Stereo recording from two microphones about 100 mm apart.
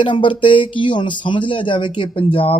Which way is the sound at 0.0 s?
55° left (ahead or behind).